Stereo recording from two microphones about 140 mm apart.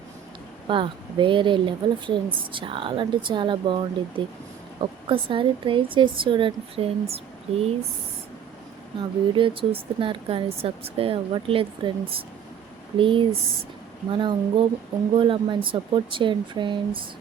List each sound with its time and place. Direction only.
0.7 s speech: 35° right (ahead or behind)
9.0 s speech: 35° right (ahead or behind)